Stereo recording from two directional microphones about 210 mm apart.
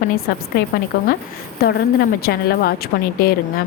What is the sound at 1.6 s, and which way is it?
A woman's voice, 50° left (ahead or behind).